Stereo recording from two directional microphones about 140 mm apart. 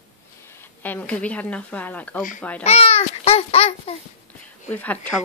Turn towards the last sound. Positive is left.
turn(degrees=10)  # may be behind; listen again after turning